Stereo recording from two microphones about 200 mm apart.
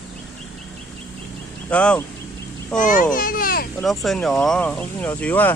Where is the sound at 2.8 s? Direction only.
40° left (ahead or behind).